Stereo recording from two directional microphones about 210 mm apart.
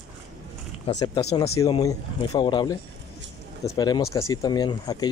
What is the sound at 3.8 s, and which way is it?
Speech, 15° left (ahead or behind).